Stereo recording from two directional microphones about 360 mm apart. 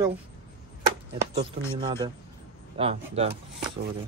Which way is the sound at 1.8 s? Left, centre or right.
Centre.